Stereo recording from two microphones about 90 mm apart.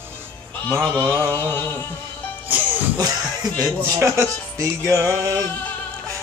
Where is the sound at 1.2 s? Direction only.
25° left (ahead or behind).